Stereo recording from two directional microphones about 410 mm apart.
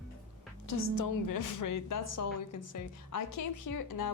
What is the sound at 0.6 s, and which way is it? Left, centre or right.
Speech, left.